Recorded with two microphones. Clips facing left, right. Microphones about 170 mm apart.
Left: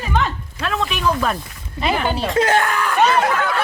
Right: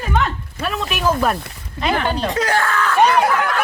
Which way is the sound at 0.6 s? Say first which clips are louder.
Even; 5° right (ahead or behind).